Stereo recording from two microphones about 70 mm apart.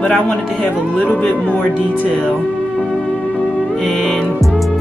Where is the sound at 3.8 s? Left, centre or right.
Centre.